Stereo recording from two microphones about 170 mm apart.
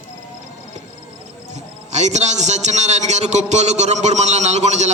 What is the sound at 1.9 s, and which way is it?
A man's voice, 40° right (ahead or behind).